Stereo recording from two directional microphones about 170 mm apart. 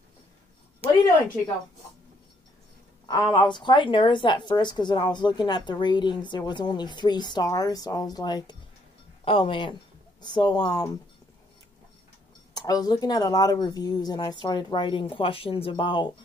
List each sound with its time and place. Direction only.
3.1 s a woman's voice: 25° left (ahead or behind)
12.5 s a woman's voice: 20° left (ahead or behind)